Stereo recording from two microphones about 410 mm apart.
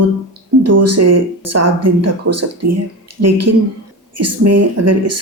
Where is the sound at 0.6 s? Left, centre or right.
Right.